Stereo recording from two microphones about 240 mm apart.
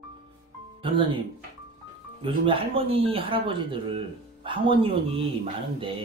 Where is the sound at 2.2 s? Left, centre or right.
Right.